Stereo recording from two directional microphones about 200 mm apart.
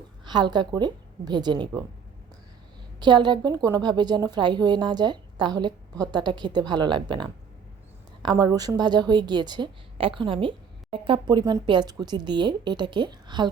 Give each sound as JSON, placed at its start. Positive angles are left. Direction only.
{"t": 0.3, "sound": "speech", "side_deg": -20}
{"t": 3.0, "sound": "speech", "side_deg": -20}